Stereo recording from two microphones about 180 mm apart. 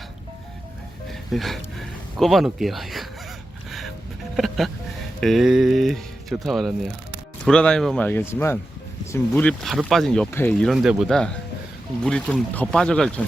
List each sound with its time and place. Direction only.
1.3 s speech: centre (ahead or behind)
4.4 s speech: centre (ahead or behind)